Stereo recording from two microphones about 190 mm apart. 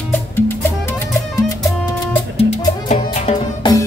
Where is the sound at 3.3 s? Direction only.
35° left (ahead or behind).